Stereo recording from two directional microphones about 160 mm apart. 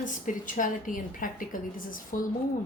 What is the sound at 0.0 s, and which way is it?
A woman's voice, 55° left (ahead or behind).